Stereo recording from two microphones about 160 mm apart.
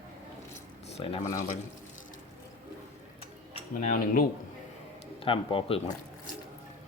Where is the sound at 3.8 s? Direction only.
60° left (ahead or behind).